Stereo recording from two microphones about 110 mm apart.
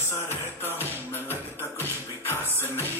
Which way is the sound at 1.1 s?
20° left (ahead or behind).